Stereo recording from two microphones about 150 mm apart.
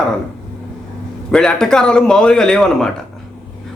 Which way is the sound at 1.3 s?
5° left (ahead or behind).